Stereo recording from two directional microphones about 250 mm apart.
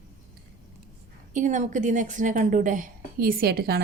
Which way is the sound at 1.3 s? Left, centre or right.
Right.